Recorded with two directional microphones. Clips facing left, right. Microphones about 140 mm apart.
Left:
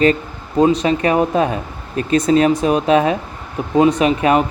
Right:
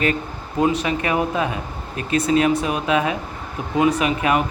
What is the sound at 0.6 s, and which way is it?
Speech, 35° left (ahead or behind).